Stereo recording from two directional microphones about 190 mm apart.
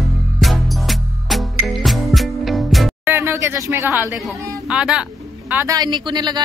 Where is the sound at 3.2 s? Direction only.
15° right (ahead or behind).